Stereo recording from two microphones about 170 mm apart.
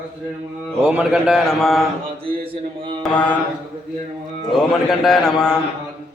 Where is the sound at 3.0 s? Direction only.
5° left (ahead or behind).